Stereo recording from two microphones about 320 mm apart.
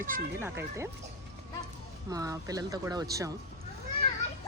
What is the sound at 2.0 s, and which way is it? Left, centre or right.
Speech, centre.